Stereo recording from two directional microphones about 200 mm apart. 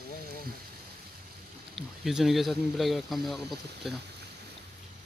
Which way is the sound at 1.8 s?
Centre (ahead or behind).